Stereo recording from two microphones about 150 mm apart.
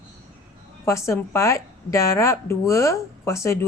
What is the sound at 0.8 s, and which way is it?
Speech, 20° left (ahead or behind).